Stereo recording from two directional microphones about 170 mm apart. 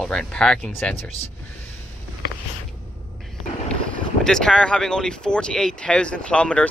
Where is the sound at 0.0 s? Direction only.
5° left (ahead or behind).